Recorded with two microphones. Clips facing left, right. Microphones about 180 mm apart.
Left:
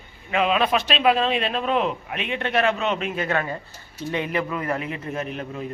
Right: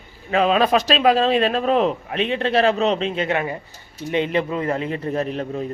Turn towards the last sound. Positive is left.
turn(degrees=-35)  # may be behind; listen again after turning